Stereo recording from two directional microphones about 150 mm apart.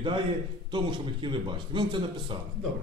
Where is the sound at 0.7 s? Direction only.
30° right (ahead or behind).